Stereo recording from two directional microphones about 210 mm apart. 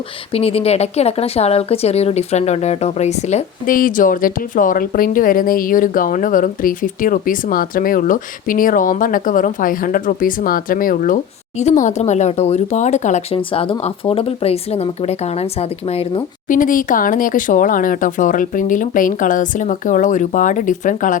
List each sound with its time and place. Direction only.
0.3 s speech: 30° left (ahead or behind)